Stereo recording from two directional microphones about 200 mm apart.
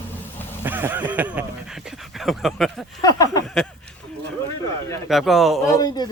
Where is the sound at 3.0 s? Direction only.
20° left (ahead or behind).